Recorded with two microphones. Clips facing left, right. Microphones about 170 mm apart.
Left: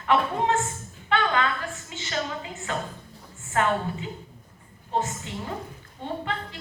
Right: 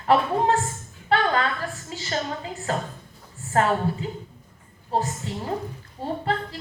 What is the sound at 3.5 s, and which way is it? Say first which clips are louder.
A woman's voice: right 3 dB; 35° right (ahead or behind).